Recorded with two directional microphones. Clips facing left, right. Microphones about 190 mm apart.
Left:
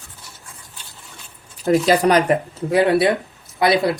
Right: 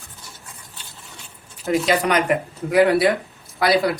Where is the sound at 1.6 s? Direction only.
35° left (ahead or behind).